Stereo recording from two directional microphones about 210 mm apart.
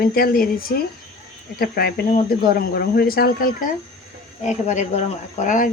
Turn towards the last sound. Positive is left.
turn(degrees=35)  # may be behind; listen again after turning